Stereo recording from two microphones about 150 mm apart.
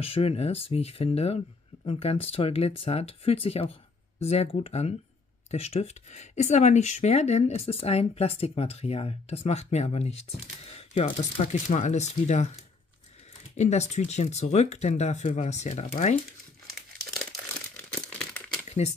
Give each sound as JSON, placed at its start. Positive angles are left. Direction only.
{"t": 0.0, "sound": "speech", "side_deg": 40}
{"t": 11.6, "sound": "speech", "side_deg": 55}
{"t": 13.6, "sound": "speech", "side_deg": 50}
{"t": 17.9, "sound": "crumpling", "side_deg": 5}